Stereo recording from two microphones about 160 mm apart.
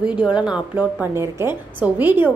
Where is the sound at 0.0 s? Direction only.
5° right (ahead or behind).